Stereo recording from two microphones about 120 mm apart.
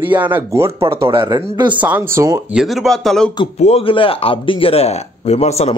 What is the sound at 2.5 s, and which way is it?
Speech, 5° right (ahead or behind).